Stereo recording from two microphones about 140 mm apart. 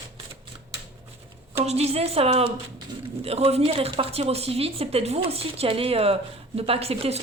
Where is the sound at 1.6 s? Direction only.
50° right (ahead or behind).